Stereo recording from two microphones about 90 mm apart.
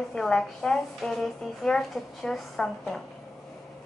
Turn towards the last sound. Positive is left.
turn(degrees=5)  # may be behind; listen again after turning